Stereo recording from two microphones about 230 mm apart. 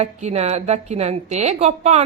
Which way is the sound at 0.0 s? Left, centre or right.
Right.